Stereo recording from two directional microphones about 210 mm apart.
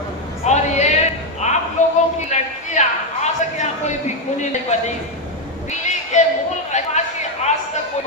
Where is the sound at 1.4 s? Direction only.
35° left (ahead or behind).